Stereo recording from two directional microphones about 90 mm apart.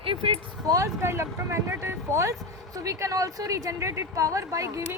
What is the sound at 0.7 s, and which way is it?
Speech, 35° right (ahead or behind).